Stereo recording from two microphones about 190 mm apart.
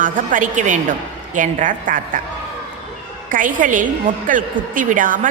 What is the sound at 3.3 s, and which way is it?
A woman's voice, 45° right (ahead or behind).